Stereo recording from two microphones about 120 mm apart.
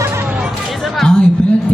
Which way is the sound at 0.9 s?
5° left (ahead or behind).